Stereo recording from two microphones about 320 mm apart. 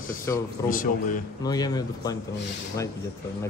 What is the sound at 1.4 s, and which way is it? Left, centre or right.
Speech, centre.